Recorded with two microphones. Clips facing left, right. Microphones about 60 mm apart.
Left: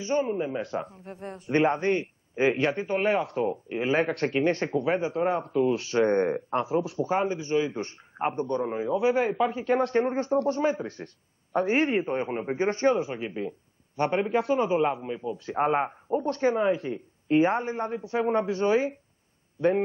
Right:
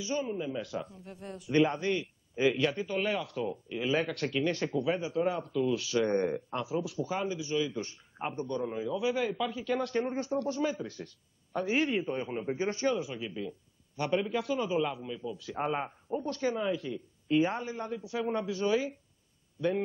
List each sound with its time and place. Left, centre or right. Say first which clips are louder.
0.0 s a man's voice: left 7 dB; left